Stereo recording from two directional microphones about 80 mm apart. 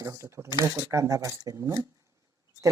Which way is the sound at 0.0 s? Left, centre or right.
Right.